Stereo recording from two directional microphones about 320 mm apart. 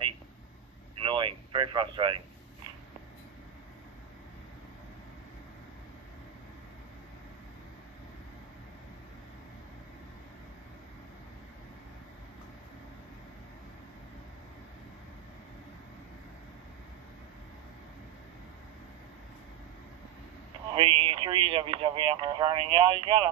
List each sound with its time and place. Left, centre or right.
1.0 s radio: centre
20.7 s speech: centre